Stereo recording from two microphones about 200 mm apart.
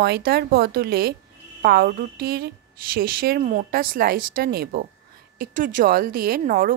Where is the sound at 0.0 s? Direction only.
50° right (ahead or behind).